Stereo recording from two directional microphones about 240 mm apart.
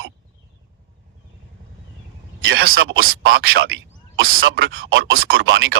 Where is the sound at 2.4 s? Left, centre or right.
Right.